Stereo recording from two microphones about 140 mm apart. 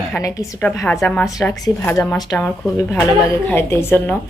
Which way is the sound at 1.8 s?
15° left (ahead or behind).